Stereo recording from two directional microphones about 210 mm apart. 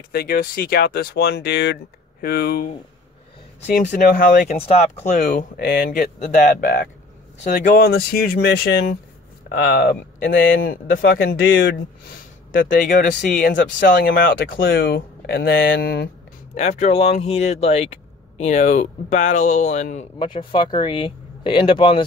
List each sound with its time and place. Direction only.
0.1 s speech: 45° left (ahead or behind)
3.8 s speech: 45° left (ahead or behind)
16.5 s speech: 35° left (ahead or behind)
20.2 s speech: 25° left (ahead or behind)